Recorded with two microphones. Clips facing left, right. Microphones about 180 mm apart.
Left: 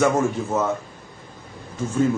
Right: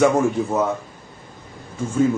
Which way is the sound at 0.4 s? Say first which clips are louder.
Right 4 dB; 15° right (ahead or behind).